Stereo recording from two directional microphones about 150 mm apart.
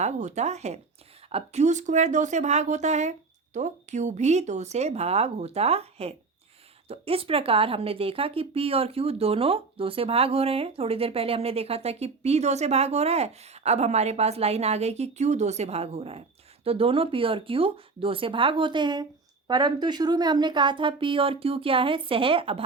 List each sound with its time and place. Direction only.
0.0 s a woman's voice: 50° right (ahead or behind)